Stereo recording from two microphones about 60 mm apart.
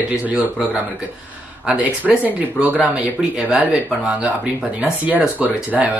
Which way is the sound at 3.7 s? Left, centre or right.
Right.